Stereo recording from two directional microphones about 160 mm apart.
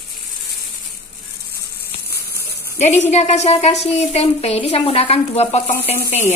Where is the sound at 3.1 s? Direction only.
45° left (ahead or behind).